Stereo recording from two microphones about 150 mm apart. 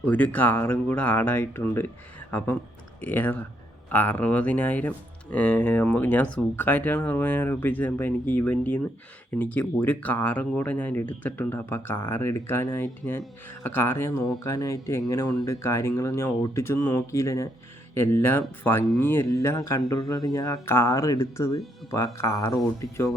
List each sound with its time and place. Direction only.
0.0 s speech: 10° left (ahead or behind)
3.0 s speech: 10° left (ahead or behind)